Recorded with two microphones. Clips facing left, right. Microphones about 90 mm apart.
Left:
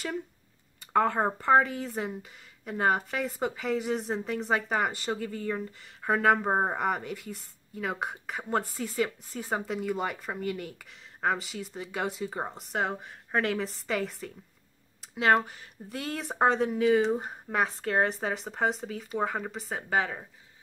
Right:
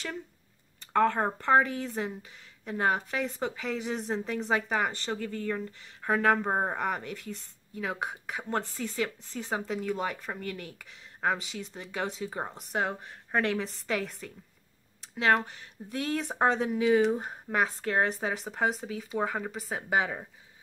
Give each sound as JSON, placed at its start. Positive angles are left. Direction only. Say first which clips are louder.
{"t": 0.7, "sound": "speech", "louder": "even", "side_deg": 10}
{"t": 6.5, "sound": "speech", "louder": "left 2 dB", "side_deg": 15}
{"t": 6.8, "sound": "speech", "louder": "left 2 dB", "side_deg": 0}
{"t": 15.0, "sound": "a sound", "louder": "left 1 dB", "side_deg": 5}
{"t": 15.4, "sound": "speech", "louder": "even", "side_deg": 5}
{"t": 19.9, "sound": "speech", "louder": "even", "side_deg": -15}